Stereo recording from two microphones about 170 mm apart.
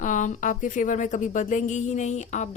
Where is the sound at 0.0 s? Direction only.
45° left (ahead or behind).